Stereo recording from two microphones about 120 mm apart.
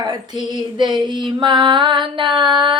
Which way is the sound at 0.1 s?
40° right (ahead or behind).